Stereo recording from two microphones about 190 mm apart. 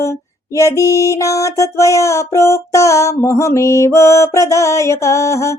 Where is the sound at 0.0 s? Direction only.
15° left (ahead or behind).